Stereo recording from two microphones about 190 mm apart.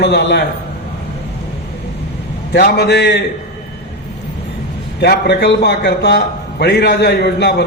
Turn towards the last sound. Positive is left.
turn(degrees=60)  # may be behind; listen again after turning